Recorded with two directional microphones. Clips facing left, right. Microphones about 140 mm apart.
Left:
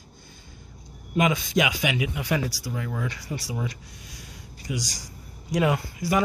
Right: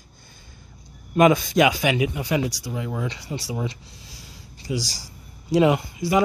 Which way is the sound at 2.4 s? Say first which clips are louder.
Right 3 dB; 20° right (ahead or behind).